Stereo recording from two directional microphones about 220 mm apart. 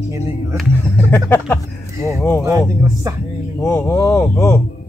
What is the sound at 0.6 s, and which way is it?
Speech, 10° left (ahead or behind).